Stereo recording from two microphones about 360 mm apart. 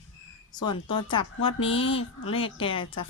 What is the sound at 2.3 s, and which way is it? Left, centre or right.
Speech, centre.